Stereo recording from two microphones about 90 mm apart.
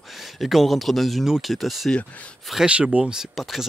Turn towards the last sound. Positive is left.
turn(degrees=-5)  # may be behind; listen again after turning